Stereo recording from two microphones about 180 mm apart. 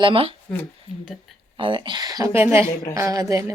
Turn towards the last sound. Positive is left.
turn(degrees=-15)  # may be behind; listen again after turning